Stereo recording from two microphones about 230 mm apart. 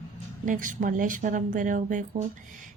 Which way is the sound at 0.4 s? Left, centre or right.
Right.